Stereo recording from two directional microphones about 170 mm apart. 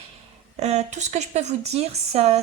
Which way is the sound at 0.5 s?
40° right (ahead or behind).